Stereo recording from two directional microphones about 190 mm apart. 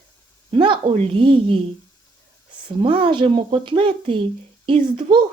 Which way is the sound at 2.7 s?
30° right (ahead or behind).